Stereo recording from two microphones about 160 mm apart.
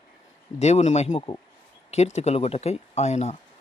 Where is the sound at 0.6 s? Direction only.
45° left (ahead or behind).